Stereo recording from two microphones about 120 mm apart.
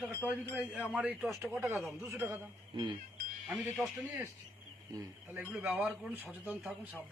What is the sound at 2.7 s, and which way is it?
Speech, 45° right (ahead or behind).